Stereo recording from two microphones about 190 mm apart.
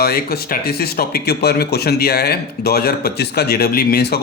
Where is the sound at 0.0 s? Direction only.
55° left (ahead or behind).